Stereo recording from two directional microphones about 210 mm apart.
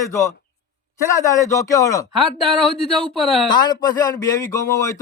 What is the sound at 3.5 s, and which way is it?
Speech, 20° left (ahead or behind).